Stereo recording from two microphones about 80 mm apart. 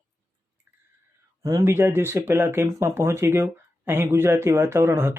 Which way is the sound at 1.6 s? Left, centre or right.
Right.